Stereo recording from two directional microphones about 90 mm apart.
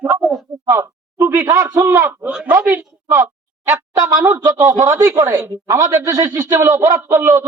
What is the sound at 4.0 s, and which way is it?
A woman's voice, 35° right (ahead or behind).